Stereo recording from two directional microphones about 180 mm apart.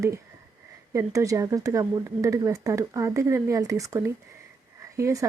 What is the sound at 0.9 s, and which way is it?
Speech, 15° right (ahead or behind).